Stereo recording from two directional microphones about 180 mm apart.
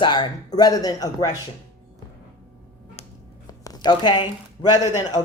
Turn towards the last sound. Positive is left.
turn(degrees=20)  # may be behind; listen again after turning